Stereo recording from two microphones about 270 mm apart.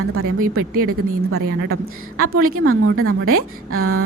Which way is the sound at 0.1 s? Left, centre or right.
Right.